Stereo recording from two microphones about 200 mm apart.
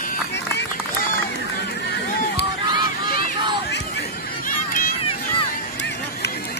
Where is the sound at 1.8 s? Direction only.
60° left (ahead or behind).